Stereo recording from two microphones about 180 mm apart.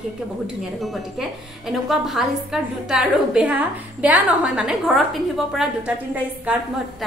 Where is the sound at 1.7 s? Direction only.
Centre (ahead or behind).